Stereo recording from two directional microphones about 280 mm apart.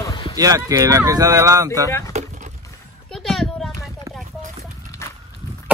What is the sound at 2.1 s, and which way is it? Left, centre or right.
Boat, right.